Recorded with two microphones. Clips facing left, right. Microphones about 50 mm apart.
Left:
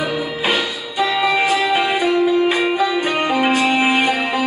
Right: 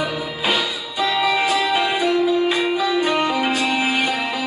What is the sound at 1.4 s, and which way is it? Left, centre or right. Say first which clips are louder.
Music: left 2 dB; centre.